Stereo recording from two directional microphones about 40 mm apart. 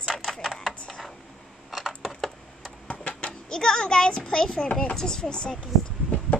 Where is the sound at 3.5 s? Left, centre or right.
Centre.